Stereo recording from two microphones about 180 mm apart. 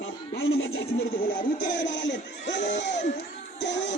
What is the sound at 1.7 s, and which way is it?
Music, 85° left.